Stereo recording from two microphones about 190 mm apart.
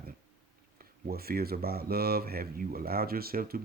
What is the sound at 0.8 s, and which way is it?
Speech, 50° right (ahead or behind).